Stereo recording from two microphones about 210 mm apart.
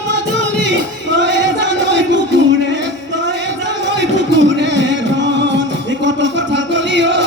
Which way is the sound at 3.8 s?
60° right (ahead or behind).